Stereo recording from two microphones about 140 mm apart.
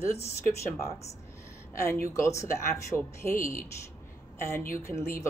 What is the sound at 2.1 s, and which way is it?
A woman's voice, 20° left (ahead or behind).